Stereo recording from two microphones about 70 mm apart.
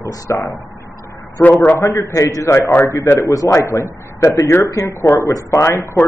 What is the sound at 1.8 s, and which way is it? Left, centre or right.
A man's voice, left.